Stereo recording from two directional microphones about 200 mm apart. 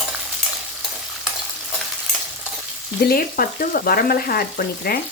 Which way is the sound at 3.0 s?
50° left (ahead or behind).